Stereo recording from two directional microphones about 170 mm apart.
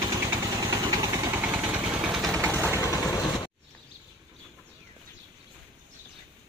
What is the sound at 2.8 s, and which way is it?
Vehicle, 20° left (ahead or behind).